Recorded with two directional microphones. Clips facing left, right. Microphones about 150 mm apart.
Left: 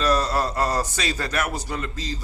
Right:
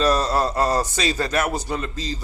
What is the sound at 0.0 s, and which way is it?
A man's voice, 25° right (ahead or behind).